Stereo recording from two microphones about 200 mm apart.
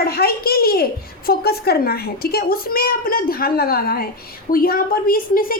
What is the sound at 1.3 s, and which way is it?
A woman's voice, 50° left (ahead or behind).